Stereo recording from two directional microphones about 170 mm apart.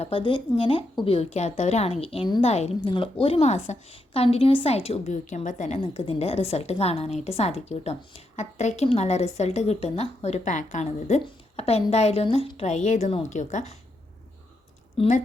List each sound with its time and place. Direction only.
0.0 s a woman's voice: 30° left (ahead or behind)
14.9 s speech: 40° left (ahead or behind)